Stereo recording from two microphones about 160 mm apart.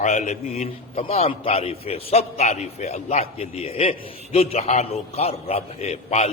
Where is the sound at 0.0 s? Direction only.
45° left (ahead or behind).